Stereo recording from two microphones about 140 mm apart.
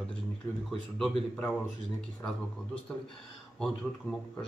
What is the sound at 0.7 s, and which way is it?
Speech, 5° left (ahead or behind).